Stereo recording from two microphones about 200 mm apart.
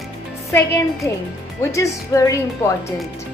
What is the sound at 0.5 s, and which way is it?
Speech, 15° left (ahead or behind).